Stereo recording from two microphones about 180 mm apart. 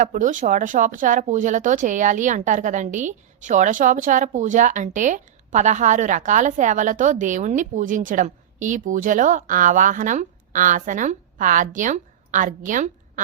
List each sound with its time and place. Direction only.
0.0 s speech: 45° right (ahead or behind)